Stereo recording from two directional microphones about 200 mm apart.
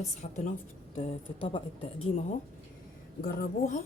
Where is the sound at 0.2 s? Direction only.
35° left (ahead or behind).